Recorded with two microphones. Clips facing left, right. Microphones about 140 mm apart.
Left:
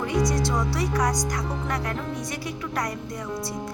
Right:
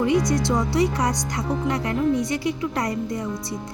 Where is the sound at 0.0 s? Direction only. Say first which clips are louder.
Right 4 dB; 20° right (ahead or behind).